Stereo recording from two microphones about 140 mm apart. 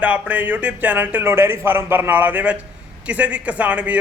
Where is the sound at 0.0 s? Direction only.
10° right (ahead or behind).